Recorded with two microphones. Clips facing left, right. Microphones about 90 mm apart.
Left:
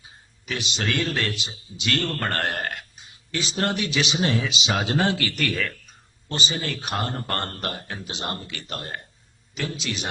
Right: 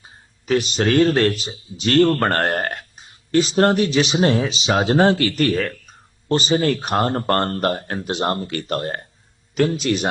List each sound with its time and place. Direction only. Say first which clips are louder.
0.4 s a man's voice: right 10 dB; 40° right (ahead or behind)